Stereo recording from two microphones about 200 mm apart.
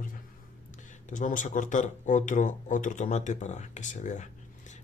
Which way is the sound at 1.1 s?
40° left (ahead or behind).